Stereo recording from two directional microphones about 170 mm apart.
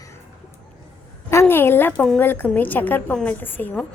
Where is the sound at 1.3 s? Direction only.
15° left (ahead or behind).